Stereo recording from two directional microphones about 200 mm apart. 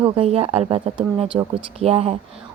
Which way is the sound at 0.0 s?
30° right (ahead or behind).